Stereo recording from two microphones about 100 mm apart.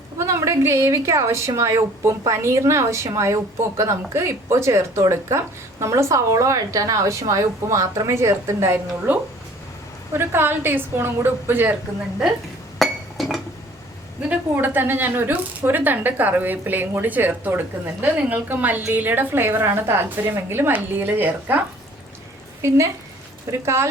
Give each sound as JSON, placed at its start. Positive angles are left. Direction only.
{"t": 0.2, "sound": "a woman's voice", "side_deg": -30}
{"t": 10.1, "sound": "a woman's voice", "side_deg": -25}
{"t": 12.8, "sound": "chink", "side_deg": 0}
{"t": 14.5, "sound": "a woman's voice", "side_deg": -20}
{"t": 23.5, "sound": "a woman's voice", "side_deg": -30}